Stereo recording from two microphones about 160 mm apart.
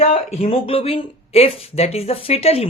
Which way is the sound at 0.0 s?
40° left (ahead or behind).